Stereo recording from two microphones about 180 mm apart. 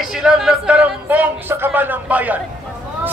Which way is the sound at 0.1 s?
5° right (ahead or behind).